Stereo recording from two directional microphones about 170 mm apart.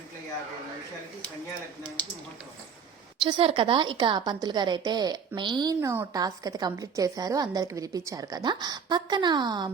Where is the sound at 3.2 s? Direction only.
30° right (ahead or behind).